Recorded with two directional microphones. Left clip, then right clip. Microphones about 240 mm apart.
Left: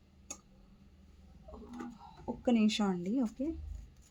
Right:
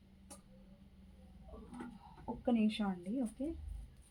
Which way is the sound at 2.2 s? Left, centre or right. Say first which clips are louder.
Left 4 dB; left.